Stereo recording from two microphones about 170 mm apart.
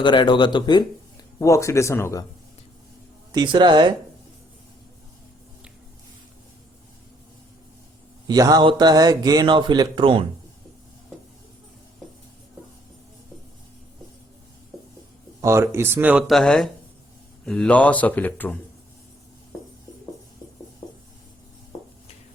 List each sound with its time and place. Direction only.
0.0 s speech: 25° left (ahead or behind)
3.3 s a man's voice: 25° right (ahead or behind)
8.3 s a man's voice: 25° right (ahead or behind)
15.4 s speech: 15° right (ahead or behind); by 18.5 s 10° left (ahead or behind)